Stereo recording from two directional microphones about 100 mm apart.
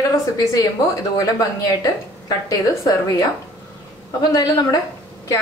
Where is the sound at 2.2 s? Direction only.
35° left (ahead or behind).